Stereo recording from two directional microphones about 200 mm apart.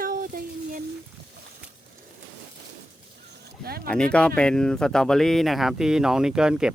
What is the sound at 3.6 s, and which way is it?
Speech, 50° right (ahead or behind).